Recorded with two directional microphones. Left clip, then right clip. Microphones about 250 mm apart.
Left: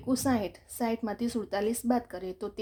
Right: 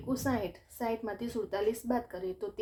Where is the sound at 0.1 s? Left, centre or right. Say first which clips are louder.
Left 4 dB; left.